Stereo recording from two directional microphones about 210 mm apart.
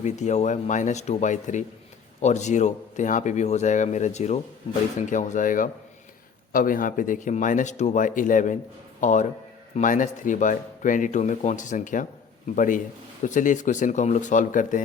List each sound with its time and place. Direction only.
0.0 s a man's voice: 35° left (ahead or behind)